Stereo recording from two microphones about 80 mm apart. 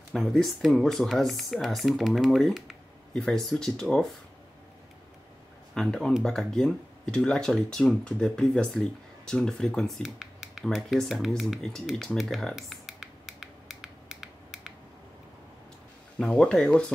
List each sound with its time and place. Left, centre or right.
0.1 s speech: centre
5.8 s speech: centre
10.0 s speech: centre
12.5 s a sound: centre
16.2 s speech: centre